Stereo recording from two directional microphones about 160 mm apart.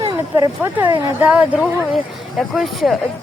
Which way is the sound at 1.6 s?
Centre (ahead or behind).